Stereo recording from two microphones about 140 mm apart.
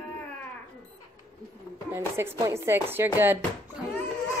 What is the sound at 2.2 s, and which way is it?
A woman's voice, 20° right (ahead or behind).